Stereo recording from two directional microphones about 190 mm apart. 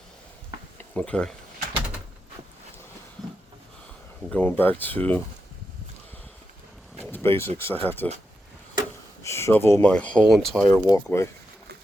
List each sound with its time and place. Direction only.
0.9 s speech: 5° left (ahead or behind)
4.3 s speech: 10° left (ahead or behind)
7.1 s speech: 15° left (ahead or behind)
9.2 s speech: 15° left (ahead or behind)